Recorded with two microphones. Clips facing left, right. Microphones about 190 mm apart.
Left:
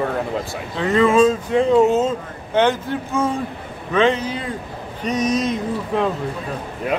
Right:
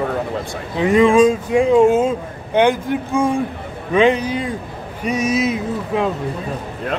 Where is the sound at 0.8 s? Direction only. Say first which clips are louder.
Right 3 dB; 15° right (ahead or behind).